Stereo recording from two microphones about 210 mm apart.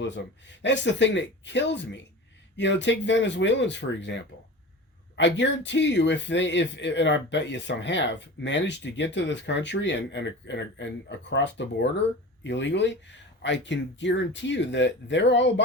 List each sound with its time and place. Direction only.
0.0 s speech: 55° left (ahead or behind)